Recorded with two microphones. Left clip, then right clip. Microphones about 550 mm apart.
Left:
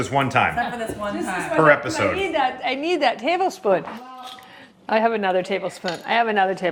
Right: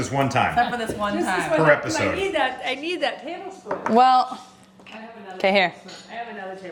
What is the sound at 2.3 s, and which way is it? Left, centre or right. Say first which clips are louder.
A woman's voice: left 2 dB; centre.